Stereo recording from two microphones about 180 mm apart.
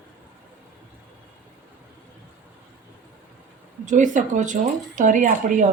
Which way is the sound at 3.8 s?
45° right (ahead or behind).